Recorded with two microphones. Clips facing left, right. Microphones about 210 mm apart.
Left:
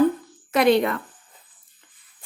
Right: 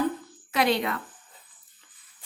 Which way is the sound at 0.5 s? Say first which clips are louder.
Left 7 dB; 50° left (ahead or behind).